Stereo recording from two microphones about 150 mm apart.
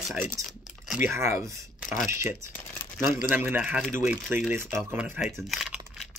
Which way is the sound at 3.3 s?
10° right (ahead or behind).